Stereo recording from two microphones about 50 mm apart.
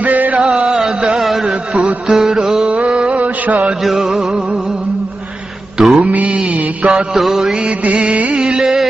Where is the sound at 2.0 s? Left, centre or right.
Centre.